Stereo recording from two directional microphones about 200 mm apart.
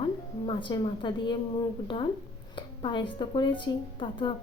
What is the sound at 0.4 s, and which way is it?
Speech, 25° left (ahead or behind).